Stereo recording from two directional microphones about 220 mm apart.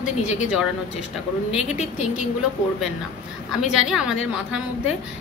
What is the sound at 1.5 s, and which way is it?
Speech, 30° left (ahead or behind).